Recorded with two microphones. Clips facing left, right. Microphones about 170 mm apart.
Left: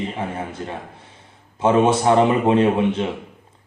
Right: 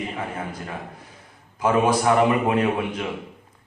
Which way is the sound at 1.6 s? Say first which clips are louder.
Left 3 dB; 25° left (ahead or behind).